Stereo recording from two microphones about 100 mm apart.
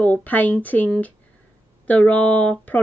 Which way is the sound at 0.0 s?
15° left (ahead or behind).